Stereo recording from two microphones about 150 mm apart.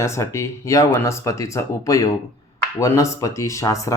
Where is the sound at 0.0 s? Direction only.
20° left (ahead or behind).